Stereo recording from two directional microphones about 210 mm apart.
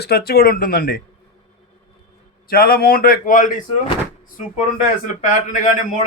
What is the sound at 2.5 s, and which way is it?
Speech, 45° left (ahead or behind).